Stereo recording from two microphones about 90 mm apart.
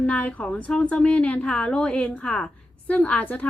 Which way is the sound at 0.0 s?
15° left (ahead or behind).